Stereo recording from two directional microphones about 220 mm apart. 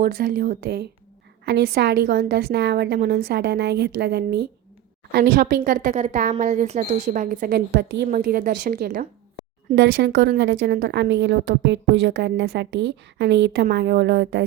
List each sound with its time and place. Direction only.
0.0 s a woman's voice: 40° right (ahead or behind)
9.7 s a woman's voice: 55° right (ahead or behind)